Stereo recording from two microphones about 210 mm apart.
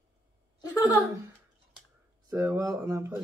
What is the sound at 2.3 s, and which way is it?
Speech, 15° right (ahead or behind).